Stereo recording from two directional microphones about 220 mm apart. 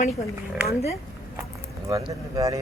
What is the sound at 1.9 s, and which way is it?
Speech, 15° right (ahead or behind).